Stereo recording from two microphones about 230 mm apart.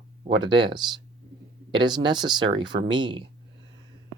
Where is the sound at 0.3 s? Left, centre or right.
Centre.